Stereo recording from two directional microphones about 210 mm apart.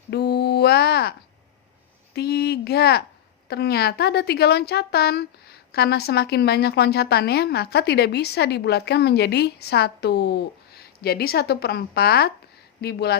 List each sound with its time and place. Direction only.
0.1 s mantra: 50° left (ahead or behind)
2.1 s a woman's voice: 50° left (ahead or behind)